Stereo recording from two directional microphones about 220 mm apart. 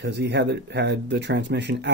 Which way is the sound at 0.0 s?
50° right (ahead or behind).